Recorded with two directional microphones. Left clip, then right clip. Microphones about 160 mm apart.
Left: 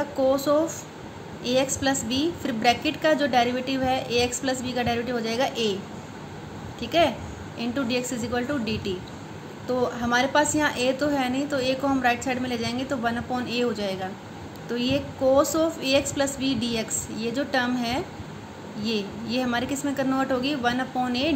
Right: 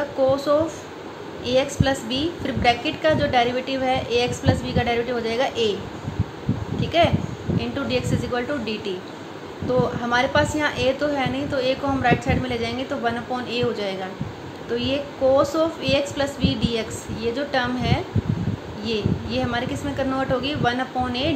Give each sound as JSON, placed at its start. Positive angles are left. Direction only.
{"t": 0.2, "sound": "speech", "side_deg": 25}
{"t": 1.4, "sound": "a woman's voice", "side_deg": 20}
{"t": 6.8, "sound": "a sound", "side_deg": 20}
{"t": 7.5, "sound": "a woman's voice", "side_deg": 20}